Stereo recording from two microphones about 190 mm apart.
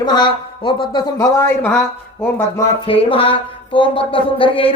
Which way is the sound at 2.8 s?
30° left (ahead or behind).